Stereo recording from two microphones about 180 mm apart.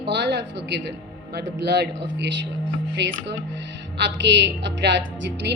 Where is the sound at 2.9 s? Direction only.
75° right (ahead or behind).